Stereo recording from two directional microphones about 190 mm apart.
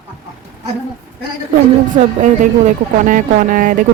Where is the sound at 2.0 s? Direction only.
40° right (ahead or behind).